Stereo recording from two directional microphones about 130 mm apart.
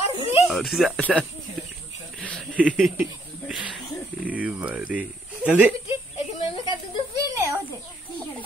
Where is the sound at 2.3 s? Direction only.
10° left (ahead or behind).